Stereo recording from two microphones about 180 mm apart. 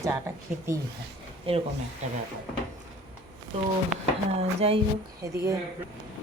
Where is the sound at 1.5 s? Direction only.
30° right (ahead or behind).